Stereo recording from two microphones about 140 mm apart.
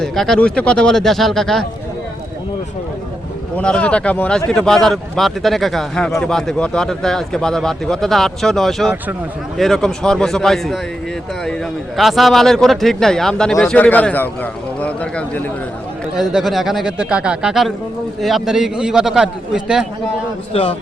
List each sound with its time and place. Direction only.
0.0 s speech: 5° left (ahead or behind)
3.6 s speech: 5° left (ahead or behind)
11.9 s a man's voice: centre (ahead or behind)
14.8 s a sound: 10° left (ahead or behind)
16.1 s speech: centre (ahead or behind)
20.5 s a man's voice: 45° left (ahead or behind)